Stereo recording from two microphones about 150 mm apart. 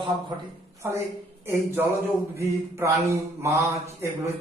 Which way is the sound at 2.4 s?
20° right (ahead or behind).